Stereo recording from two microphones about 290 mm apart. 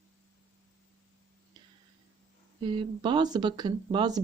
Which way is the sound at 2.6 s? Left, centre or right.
Centre.